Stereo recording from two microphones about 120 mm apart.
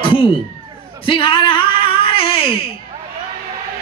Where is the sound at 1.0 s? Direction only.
45° left (ahead or behind).